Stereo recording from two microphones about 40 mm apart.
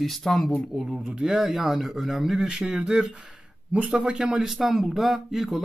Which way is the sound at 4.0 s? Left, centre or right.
Centre.